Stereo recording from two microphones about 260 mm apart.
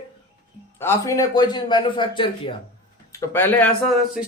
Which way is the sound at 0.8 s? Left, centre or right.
Centre.